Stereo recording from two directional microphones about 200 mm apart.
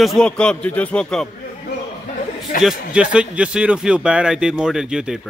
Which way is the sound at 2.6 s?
5° right (ahead or behind).